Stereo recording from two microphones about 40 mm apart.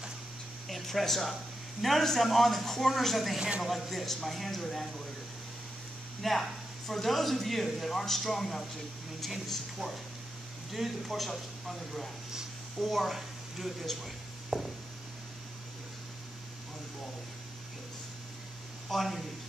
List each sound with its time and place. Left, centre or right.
0.7 s speech: centre
3.3 s speech: right
3.6 s speech: centre
6.2 s speech: centre
18.9 s speech: centre